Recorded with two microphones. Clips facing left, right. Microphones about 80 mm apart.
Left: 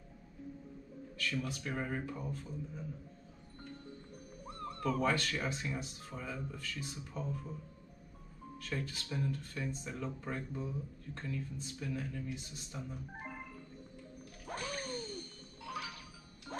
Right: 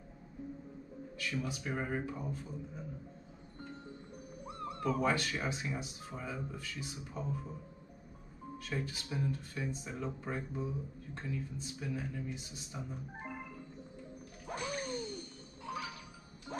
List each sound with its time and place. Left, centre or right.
1.1 s speech: centre
4.5 s speech: centre
8.5 s speech: centre
14.4 s music: centre
16.5 s music: centre